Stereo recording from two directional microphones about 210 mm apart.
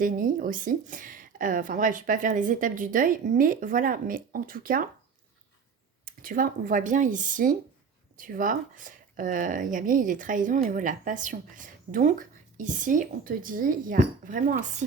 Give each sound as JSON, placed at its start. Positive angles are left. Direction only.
{"t": 0.0, "sound": "a woman's voice", "side_deg": -40}
{"t": 6.1, "sound": "a woman's voice", "side_deg": -40}